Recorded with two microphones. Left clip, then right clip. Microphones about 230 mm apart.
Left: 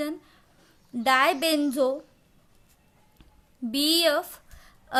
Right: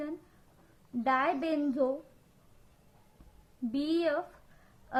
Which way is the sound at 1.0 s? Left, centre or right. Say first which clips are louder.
Left 8 dB; left.